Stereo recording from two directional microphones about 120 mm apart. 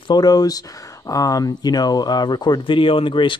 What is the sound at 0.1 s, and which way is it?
Speech, 35° left (ahead or behind).